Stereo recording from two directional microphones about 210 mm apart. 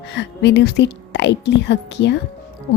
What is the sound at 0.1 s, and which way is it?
A woman's voice, 55° left (ahead or behind).